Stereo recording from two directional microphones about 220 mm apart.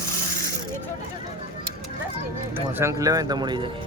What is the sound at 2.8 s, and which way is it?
Speech, 15° right (ahead or behind).